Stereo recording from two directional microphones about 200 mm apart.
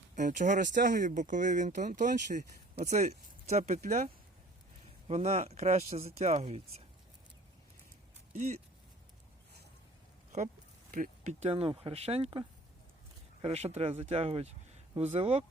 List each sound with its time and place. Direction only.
0.2 s speech: 40° right (ahead or behind)
8.3 s speech: 35° right (ahead or behind)
10.3 s speech: 35° right (ahead or behind)